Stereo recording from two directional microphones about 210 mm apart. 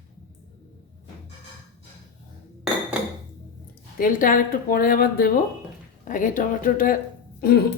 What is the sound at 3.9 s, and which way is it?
Speech, 40° left (ahead or behind).